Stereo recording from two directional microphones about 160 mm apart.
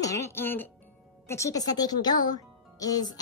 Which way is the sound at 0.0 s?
20° left (ahead or behind).